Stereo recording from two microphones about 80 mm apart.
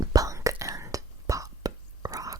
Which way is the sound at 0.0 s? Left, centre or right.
Right.